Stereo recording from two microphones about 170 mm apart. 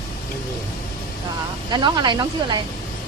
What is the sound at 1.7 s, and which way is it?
Speech, 25° right (ahead or behind).